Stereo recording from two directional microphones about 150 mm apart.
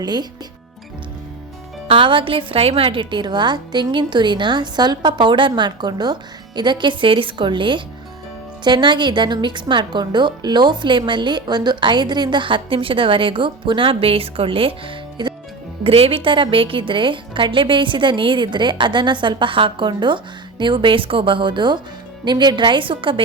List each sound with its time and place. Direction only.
0.0 s speech: 30° right (ahead or behind)
1.9 s a woman's voice: 35° right (ahead or behind)